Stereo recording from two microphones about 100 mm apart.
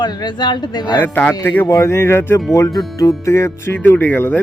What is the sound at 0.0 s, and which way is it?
Speech, 50° left (ahead or behind).